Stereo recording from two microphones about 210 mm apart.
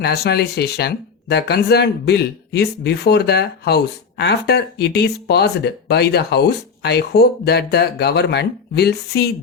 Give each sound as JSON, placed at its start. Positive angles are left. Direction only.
{"t": 0.0, "sound": "speech", "side_deg": 50}